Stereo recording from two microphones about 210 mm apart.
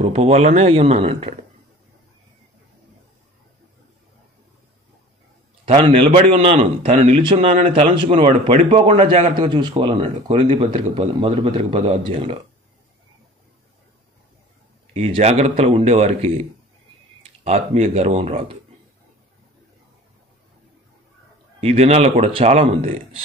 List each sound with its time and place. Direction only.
0.0 s speech: 30° right (ahead or behind)
5.7 s a man's voice: 35° right (ahead or behind)
9.5 s a man's voice: 20° right (ahead or behind); by 10.8 s 35° right (ahead or behind)
11.0 s a man's voice: 25° right (ahead or behind)
15.0 s a man's voice: 30° right (ahead or behind)
21.5 s a man's voice: 30° right (ahead or behind)